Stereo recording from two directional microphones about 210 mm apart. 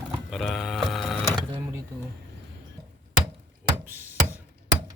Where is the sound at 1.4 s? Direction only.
20° right (ahead or behind).